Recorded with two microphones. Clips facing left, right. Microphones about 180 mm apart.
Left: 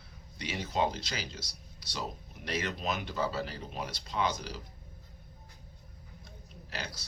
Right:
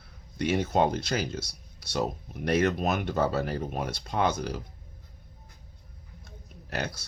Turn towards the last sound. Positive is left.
turn(degrees=-55)  # may be behind; listen again after turning